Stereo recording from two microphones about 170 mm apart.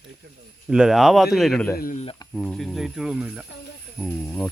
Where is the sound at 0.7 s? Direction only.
5° right (ahead or behind).